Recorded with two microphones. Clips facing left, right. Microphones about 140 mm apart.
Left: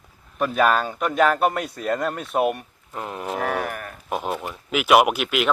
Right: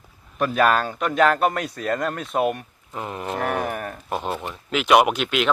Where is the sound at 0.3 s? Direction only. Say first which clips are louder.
Even; centre (ahead or behind).